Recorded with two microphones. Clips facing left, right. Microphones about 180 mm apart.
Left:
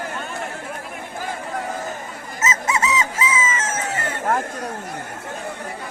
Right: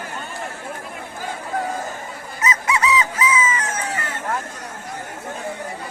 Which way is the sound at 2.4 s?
45° left (ahead or behind).